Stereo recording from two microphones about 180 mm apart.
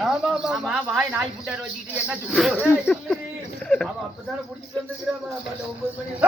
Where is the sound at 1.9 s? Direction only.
5° right (ahead or behind).